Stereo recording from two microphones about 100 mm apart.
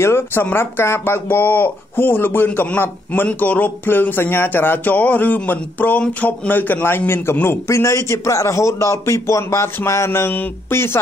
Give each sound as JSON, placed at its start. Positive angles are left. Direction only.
{"t": 0.0, "sound": "speech", "side_deg": 25}